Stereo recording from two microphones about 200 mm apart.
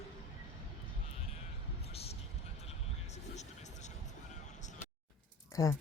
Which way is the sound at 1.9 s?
30° left (ahead or behind).